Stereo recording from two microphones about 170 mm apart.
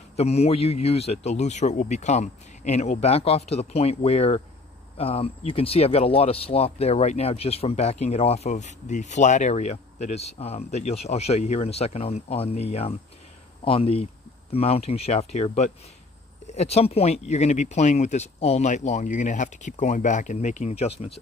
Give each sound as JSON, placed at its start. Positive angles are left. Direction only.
{"t": 0.1, "sound": "speech", "side_deg": 40}